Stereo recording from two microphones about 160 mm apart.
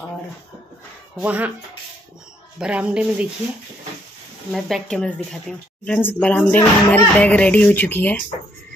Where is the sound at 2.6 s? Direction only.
5° right (ahead or behind).